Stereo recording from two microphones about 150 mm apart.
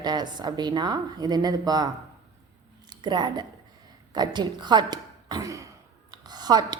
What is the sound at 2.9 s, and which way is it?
A woman's voice, 30° right (ahead or behind).